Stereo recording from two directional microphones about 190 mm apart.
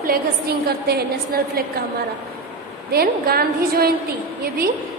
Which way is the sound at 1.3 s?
50° right (ahead or behind).